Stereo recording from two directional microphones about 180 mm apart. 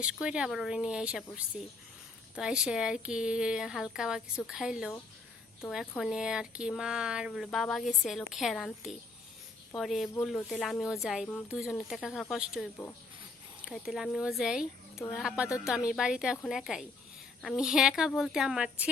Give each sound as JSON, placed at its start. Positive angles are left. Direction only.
{"t": 0.0, "sound": "speech", "side_deg": -5}